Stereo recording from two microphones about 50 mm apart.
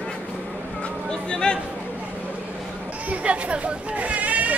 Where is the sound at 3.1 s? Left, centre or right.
Right.